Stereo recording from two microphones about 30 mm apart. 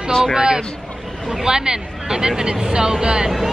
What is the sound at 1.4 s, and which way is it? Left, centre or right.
A woman's voice, right.